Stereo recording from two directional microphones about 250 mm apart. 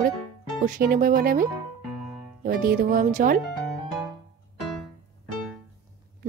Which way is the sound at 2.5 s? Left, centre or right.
Right.